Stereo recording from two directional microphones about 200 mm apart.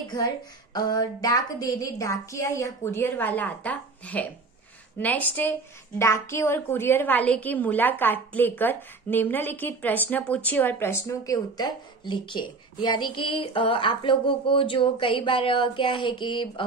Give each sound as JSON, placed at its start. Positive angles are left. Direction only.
{"t": 0.7, "sound": "a woman's voice", "side_deg": 20}